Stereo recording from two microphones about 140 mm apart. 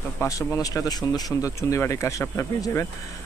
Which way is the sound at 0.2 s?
20° left (ahead or behind).